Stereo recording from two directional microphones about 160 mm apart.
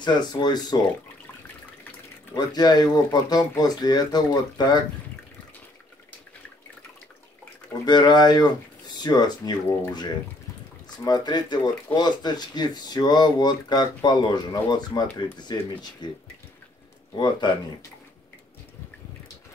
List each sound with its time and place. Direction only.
0.0 s speech: 25° left (ahead or behind)
2.3 s speech: 25° left (ahead or behind)
7.8 s speech: 30° left (ahead or behind)